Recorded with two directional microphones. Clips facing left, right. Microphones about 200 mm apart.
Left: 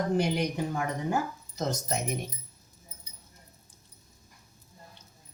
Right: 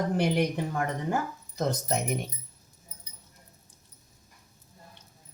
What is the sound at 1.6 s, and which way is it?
Speech, 60° right (ahead or behind).